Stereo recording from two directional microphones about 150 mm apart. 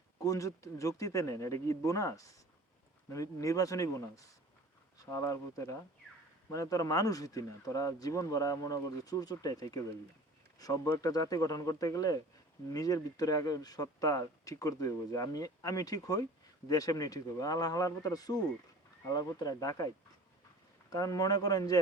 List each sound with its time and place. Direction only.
0.2 s speech: 20° left (ahead or behind)
20.9 s speech: 25° left (ahead or behind)